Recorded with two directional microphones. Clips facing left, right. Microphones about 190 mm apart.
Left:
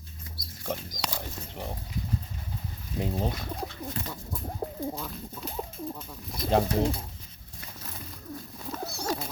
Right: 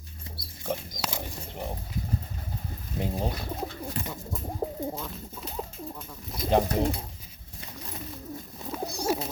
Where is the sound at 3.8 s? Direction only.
10° right (ahead or behind).